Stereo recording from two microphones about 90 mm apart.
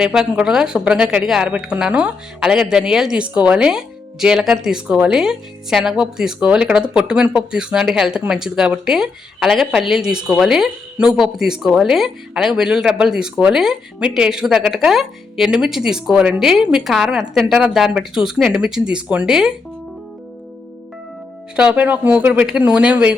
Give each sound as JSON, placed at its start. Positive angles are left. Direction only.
{"t": 0.0, "sound": "speech", "side_deg": -5}
{"t": 21.5, "sound": "speech", "side_deg": -10}